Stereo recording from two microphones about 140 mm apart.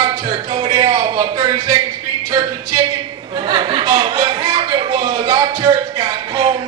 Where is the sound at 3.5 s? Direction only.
35° right (ahead or behind).